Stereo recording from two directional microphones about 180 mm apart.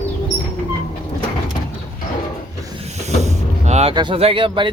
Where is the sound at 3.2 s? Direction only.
40° right (ahead or behind).